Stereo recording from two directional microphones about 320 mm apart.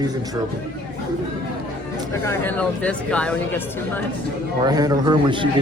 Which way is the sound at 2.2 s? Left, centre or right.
Centre.